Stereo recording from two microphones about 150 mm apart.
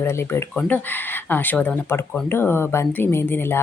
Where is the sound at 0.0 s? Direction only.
15° left (ahead or behind).